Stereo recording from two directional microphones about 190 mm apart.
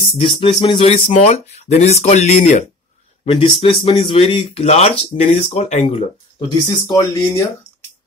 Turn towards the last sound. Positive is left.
turn(degrees=15)  # may be behind; listen again after turning